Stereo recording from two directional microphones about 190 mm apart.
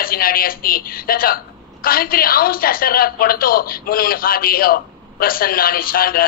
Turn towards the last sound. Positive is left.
turn(degrees=50)  # may be behind; listen again after turning